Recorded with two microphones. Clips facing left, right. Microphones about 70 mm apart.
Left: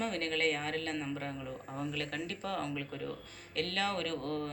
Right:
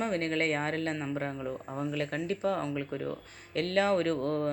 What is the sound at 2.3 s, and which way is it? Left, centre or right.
Speech, right.